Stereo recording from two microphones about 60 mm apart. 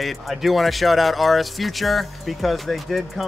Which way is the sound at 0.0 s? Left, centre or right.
Centre.